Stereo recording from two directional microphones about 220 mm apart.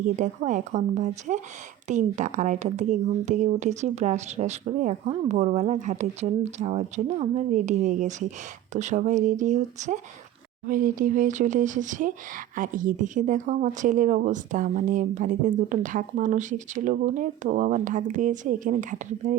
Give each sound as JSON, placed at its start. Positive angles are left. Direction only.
{"t": 0.0, "sound": "speech", "side_deg": -35}